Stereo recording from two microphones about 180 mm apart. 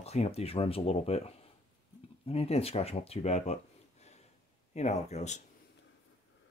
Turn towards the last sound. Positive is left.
turn(degrees=40)  # may be behind; listen again after turning